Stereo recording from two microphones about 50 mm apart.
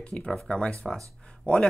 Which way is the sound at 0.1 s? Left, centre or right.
Centre.